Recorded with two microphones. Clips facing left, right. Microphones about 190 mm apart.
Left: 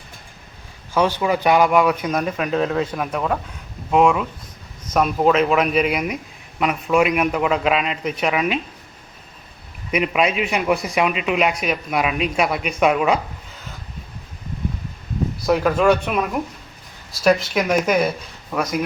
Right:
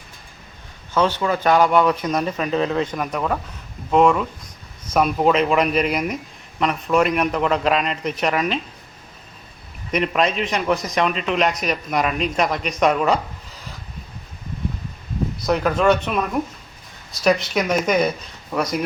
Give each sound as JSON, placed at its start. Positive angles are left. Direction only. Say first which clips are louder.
{"t": 0.9, "sound": "a man's voice", "louder": "left 1 dB", "side_deg": 10}
{"t": 9.9, "sound": "a man's voice", "louder": "left 1 dB", "side_deg": 5}
{"t": 15.4, "sound": "a man's voice", "louder": "left 1 dB", "side_deg": 5}